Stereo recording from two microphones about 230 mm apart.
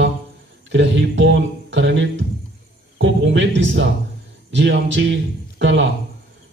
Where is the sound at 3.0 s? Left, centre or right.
Right.